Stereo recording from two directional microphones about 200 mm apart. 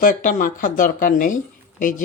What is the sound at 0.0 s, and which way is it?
Speech, 40° left (ahead or behind).